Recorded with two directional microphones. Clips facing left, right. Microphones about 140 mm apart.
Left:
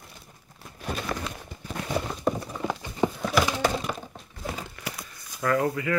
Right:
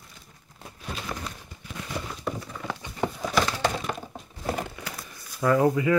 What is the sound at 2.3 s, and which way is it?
Horse, 45° left (ahead or behind).